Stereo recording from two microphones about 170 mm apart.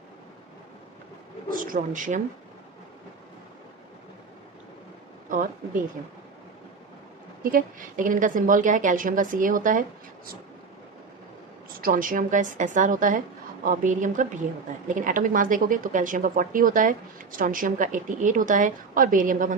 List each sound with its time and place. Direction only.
1.5 s speech: 55° right (ahead or behind)
7.5 s a woman's voice: 50° right (ahead or behind)
11.8 s a woman's voice: 55° right (ahead or behind)